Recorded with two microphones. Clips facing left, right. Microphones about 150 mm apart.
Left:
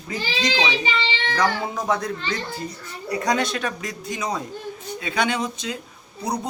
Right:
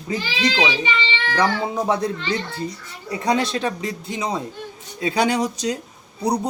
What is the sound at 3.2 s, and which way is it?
A man's voice, 30° right (ahead or behind).